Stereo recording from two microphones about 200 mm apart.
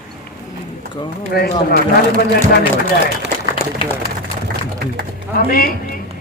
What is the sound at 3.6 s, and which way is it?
Speech, 10° left (ahead or behind).